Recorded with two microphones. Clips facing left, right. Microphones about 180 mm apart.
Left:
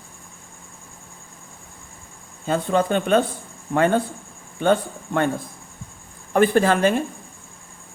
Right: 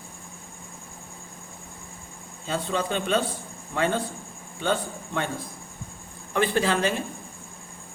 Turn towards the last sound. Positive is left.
turn(degrees=50)  # may be behind; listen again after turning